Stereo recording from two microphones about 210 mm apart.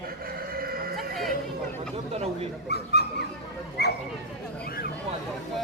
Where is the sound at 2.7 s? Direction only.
50° left (ahead or behind).